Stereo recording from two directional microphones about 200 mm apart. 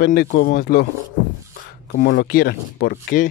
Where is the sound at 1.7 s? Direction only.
45° left (ahead or behind).